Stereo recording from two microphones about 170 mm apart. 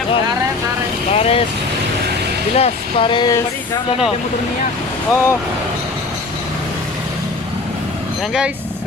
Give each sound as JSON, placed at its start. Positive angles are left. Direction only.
{"t": 1.1, "sound": "vehicle", "side_deg": 35}
{"t": 2.6, "sound": "speech", "side_deg": 30}
{"t": 5.1, "sound": "speech", "side_deg": 15}